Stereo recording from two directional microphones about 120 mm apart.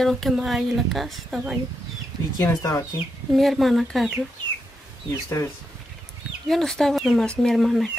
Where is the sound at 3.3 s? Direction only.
Centre (ahead or behind).